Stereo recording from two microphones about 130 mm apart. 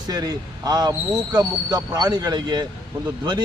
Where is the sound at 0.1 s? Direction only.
30° right (ahead or behind).